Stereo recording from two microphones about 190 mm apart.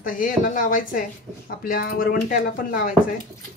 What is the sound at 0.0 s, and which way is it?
Speech, 45° left (ahead or behind).